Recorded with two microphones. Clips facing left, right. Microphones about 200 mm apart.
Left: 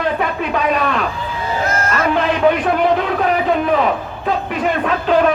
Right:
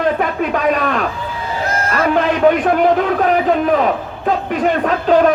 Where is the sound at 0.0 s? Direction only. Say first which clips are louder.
Right 3 dB; 45° right (ahead or behind).